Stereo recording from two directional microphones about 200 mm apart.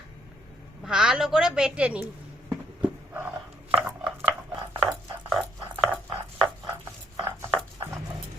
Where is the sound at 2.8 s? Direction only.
10° right (ahead or behind).